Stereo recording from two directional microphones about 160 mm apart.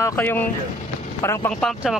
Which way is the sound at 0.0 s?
15° left (ahead or behind).